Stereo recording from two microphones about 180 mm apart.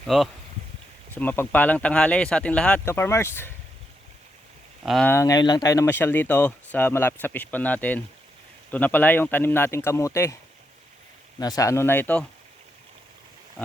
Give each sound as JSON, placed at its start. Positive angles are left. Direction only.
{"t": 0.0, "sound": "speech", "side_deg": 0}
{"t": 1.1, "sound": "speech", "side_deg": 10}
{"t": 4.9, "sound": "speech", "side_deg": 5}
{"t": 5.1, "sound": "speech", "side_deg": 20}
{"t": 11.3, "sound": "speech", "side_deg": 20}